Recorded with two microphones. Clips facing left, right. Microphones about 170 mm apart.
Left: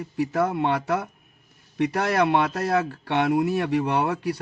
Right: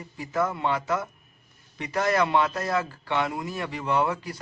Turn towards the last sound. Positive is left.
turn(degrees=65)  # may be behind; listen again after turning